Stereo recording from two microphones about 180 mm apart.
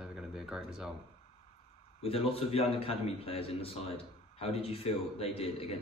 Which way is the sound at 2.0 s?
30° left (ahead or behind).